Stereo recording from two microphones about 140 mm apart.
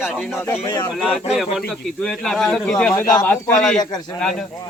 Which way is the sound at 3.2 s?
15° left (ahead or behind).